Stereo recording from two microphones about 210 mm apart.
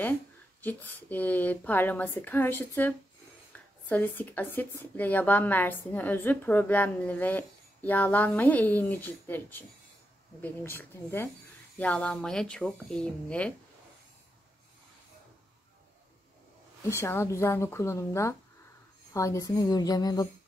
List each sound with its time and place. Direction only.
0.6 s speech: 10° left (ahead or behind)
16.8 s speech: 10° left (ahead or behind)